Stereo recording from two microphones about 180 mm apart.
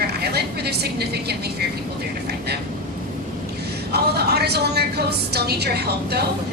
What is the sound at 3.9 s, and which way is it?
A woman's voice, 65° right (ahead or behind).